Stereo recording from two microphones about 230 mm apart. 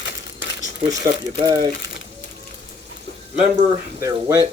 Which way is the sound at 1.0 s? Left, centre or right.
Centre.